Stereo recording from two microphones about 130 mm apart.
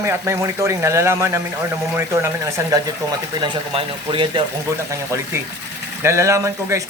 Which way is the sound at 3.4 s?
40° right (ahead or behind).